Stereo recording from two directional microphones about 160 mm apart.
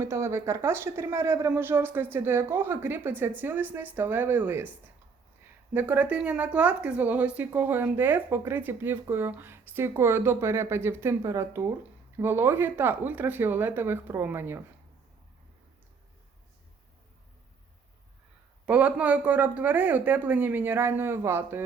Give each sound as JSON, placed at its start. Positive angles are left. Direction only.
{"t": 0.0, "sound": "speech", "side_deg": -15}
{"t": 5.7, "sound": "speech", "side_deg": -10}
{"t": 18.6, "sound": "speech", "side_deg": -10}